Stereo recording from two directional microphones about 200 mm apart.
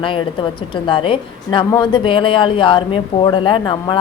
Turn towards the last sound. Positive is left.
turn(degrees=25)  # may be behind; listen again after turning